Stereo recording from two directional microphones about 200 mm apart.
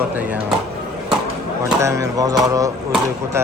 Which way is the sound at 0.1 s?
10° right (ahead or behind).